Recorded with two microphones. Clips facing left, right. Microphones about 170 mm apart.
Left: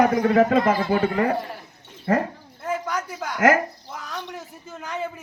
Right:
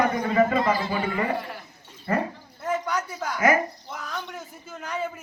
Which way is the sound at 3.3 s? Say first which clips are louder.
Left 3 dB; 90° left.